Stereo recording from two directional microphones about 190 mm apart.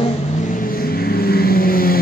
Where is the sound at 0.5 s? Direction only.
50° left (ahead or behind).